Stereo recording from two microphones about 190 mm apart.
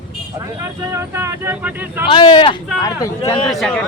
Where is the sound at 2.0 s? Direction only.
25° left (ahead or behind).